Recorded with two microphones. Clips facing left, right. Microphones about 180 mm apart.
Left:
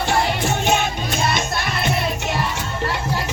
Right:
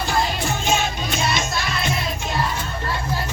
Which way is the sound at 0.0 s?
70° left (ahead or behind).